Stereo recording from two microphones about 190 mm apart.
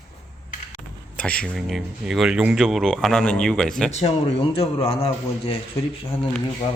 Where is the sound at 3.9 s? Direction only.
35° left (ahead or behind).